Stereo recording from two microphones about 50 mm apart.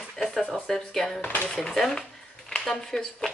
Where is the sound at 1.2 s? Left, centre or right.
Left.